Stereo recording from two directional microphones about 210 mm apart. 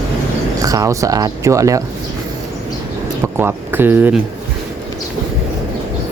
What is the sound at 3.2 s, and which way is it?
Speech, 10° right (ahead or behind).